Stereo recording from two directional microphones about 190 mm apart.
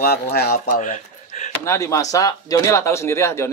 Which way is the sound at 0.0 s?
55° left (ahead or behind).